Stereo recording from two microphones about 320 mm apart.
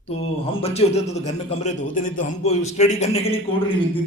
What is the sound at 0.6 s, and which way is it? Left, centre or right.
A man's voice, centre.